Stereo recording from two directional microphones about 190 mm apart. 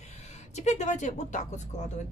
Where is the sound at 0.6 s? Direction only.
35° left (ahead or behind).